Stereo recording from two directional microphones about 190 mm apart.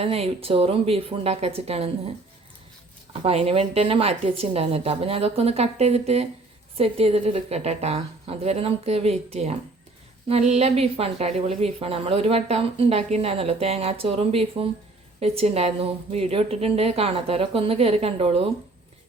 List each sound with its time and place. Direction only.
0.0 s a woman's voice: 30° right (ahead or behind)